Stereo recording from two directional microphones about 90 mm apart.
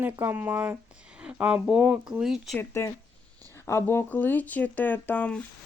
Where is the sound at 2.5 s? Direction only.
30° left (ahead or behind).